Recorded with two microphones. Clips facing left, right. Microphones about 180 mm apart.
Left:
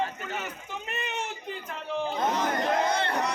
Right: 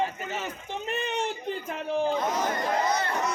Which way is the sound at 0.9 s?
35° right (ahead or behind).